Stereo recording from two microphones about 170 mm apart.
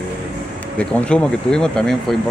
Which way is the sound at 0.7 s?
5° left (ahead or behind).